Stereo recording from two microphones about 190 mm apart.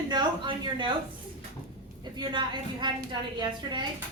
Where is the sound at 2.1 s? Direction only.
25° right (ahead or behind).